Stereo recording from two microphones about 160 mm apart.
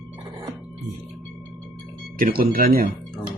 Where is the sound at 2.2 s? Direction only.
65° right (ahead or behind).